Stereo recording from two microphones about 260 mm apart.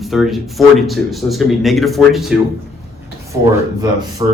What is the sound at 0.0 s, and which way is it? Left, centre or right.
A man's voice, centre.